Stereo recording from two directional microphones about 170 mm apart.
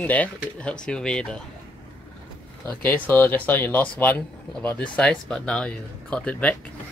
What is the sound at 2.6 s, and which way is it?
Speech, 10° left (ahead or behind).